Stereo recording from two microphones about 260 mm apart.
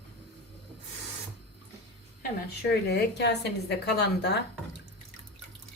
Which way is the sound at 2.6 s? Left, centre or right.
Left.